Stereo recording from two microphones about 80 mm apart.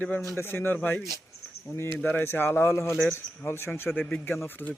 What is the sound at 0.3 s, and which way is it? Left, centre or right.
A man's voice, left.